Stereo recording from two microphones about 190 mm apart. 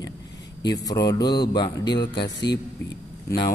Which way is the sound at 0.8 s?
20° left (ahead or behind).